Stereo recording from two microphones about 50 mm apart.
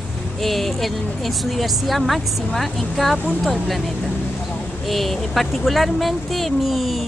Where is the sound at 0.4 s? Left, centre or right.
Centre.